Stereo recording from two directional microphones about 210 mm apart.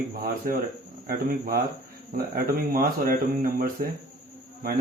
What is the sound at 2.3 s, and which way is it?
Speech, 45° right (ahead or behind).